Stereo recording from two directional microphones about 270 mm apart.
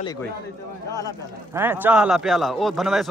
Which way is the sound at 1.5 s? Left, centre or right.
Centre.